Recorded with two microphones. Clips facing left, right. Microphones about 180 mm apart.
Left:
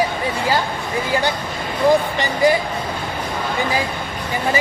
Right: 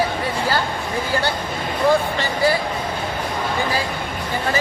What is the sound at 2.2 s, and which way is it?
Speech, 20° left (ahead or behind).